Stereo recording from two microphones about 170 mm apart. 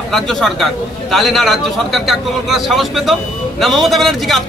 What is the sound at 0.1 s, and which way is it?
Speech, centre (ahead or behind).